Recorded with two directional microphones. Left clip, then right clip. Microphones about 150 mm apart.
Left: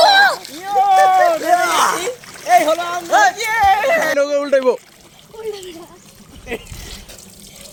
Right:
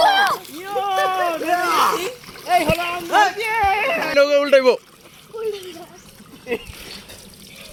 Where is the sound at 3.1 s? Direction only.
25° left (ahead or behind).